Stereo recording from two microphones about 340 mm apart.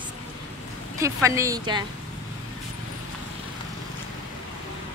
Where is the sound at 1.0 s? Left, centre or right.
Centre.